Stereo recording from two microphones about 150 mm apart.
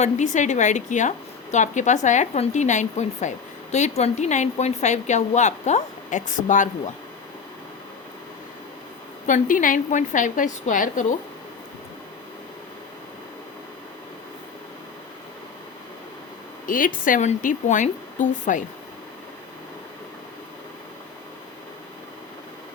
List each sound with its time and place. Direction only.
0.0 s a woman's voice: 55° left (ahead or behind)
9.2 s a woman's voice: 60° left (ahead or behind)
16.6 s a woman's voice: 65° left (ahead or behind)